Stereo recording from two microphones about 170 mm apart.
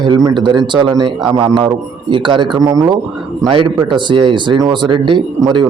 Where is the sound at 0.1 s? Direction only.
30° right (ahead or behind).